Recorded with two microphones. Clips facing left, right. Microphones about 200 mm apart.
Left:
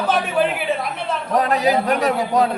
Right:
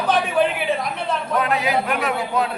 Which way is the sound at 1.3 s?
40° left (ahead or behind).